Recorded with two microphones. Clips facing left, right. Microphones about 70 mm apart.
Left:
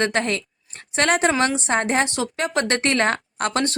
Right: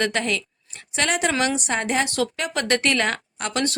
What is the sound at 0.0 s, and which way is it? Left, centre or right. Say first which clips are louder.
Speech: left 2 dB; left.